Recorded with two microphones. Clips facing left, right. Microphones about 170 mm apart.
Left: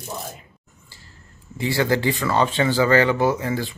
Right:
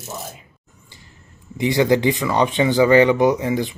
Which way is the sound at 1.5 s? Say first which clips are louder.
Right 4 dB; 20° right (ahead or behind).